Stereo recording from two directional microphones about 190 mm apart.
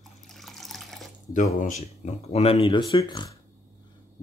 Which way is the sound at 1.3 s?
40° left (ahead or behind).